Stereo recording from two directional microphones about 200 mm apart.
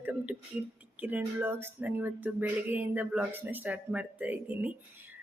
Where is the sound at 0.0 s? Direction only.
5° right (ahead or behind).